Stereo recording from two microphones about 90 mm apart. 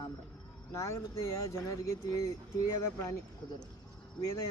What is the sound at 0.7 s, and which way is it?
Speech, 35° left (ahead or behind).